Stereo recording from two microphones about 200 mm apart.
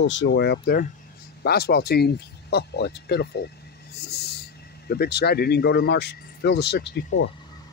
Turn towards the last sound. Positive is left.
turn(degrees=60)  # may be behind; listen again after turning